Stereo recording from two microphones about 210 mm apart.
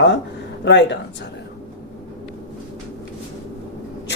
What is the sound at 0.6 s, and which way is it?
Speech, 55° left (ahead or behind).